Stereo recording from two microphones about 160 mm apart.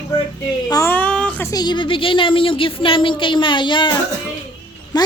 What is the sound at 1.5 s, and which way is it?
A woman's voice, 25° left (ahead or behind).